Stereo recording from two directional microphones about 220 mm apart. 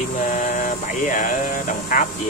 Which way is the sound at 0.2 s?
35° left (ahead or behind).